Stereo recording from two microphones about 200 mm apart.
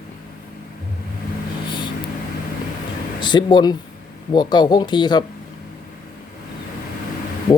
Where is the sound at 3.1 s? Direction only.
20° left (ahead or behind).